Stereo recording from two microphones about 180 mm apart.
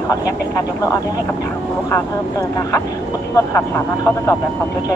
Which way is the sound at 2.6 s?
15° left (ahead or behind).